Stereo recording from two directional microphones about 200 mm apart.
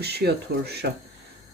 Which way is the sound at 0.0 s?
55° right (ahead or behind).